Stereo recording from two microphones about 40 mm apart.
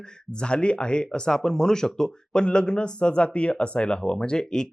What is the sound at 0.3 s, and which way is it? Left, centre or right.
Speech, left.